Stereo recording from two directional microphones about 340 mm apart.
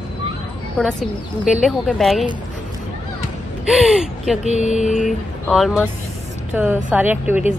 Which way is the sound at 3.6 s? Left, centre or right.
Centre.